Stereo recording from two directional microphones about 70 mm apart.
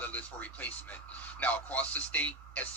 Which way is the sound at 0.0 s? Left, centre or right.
Left.